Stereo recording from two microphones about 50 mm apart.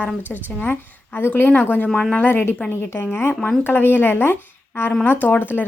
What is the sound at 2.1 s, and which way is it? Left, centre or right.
A woman's voice, left.